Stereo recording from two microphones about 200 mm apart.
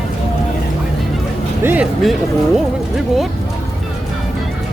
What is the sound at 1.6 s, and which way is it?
Speech, 5° right (ahead or behind).